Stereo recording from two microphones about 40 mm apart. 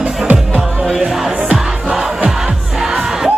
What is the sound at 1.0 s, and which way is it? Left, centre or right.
Music, centre.